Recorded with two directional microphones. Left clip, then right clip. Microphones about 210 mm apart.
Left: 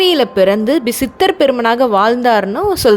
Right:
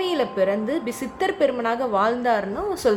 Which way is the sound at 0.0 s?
45° left (ahead or behind).